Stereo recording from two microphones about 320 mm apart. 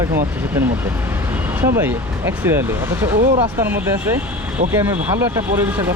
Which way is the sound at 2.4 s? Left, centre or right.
Centre.